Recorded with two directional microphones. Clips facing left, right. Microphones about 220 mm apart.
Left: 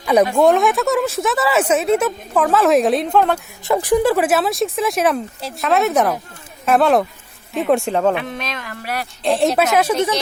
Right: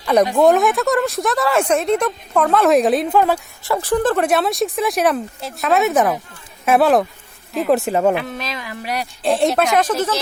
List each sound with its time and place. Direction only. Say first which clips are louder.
0.0 s speech: even; 10° left (ahead or behind)
3.6 s speech: left 4 dB; 15° left (ahead or behind); by 9.0 s 15° right (ahead or behind)
9.2 s speech: even; centre (ahead or behind)